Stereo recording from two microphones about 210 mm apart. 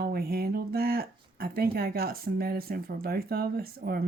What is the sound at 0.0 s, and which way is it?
Speech, 45° right (ahead or behind).